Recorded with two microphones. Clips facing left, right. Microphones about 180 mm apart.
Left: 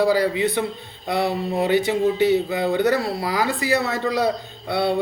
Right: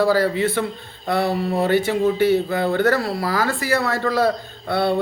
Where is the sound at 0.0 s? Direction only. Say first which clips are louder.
Right 1 dB; 15° left (ahead or behind).